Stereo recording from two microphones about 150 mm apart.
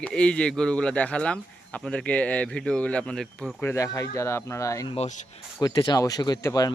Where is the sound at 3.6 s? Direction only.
20° left (ahead or behind).